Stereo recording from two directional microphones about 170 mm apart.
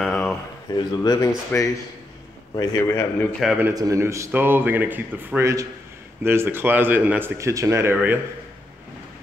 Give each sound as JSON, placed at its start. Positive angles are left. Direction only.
{"t": 0.0, "sound": "a sound", "side_deg": 0}
{"t": 0.7, "sound": "a man's voice", "side_deg": 20}
{"t": 3.5, "sound": "a man's voice", "side_deg": -15}